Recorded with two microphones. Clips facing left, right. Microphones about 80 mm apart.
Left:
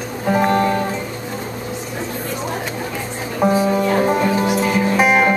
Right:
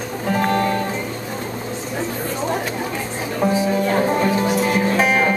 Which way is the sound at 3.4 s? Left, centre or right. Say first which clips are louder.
Left 3 dB; centre.